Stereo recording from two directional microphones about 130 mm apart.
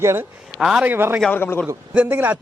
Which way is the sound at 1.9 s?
10° right (ahead or behind).